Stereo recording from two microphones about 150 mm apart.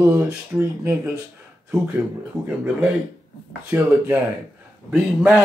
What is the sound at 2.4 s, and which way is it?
Speech, 5° right (ahead or behind).